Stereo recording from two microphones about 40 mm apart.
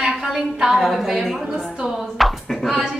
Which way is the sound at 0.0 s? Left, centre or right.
Centre.